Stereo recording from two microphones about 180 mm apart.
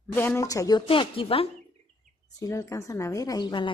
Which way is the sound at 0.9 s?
30° left (ahead or behind).